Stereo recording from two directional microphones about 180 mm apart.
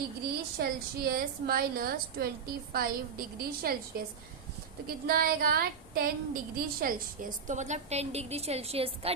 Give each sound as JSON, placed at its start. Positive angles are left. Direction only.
{"t": 0.6, "sound": "a woman's voice", "side_deg": -55}
{"t": 4.9, "sound": "speech", "side_deg": -55}